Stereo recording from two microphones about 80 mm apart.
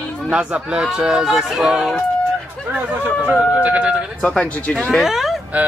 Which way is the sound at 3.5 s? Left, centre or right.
Centre.